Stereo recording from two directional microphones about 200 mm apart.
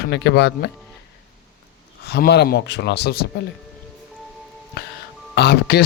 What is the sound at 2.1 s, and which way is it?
A man's voice, 55° left (ahead or behind).